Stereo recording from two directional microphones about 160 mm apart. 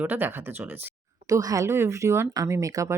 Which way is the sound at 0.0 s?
10° right (ahead or behind).